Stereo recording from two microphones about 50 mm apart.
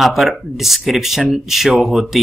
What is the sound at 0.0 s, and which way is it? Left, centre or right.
Speech, centre.